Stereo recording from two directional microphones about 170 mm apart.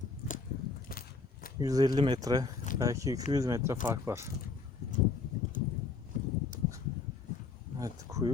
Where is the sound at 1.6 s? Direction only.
20° right (ahead or behind).